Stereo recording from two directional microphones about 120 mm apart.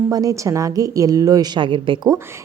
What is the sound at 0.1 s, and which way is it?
Speech, 30° right (ahead or behind).